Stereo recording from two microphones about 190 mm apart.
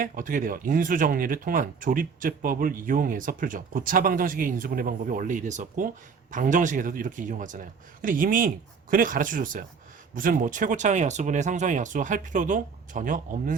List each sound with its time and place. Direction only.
0.0 s speech: 45° right (ahead or behind)